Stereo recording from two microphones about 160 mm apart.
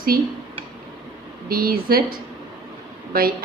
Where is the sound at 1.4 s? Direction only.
65° right (ahead or behind).